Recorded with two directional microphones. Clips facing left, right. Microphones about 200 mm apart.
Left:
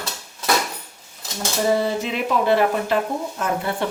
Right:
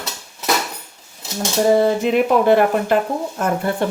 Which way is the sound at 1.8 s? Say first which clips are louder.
Right 7 dB; 50° right (ahead or behind).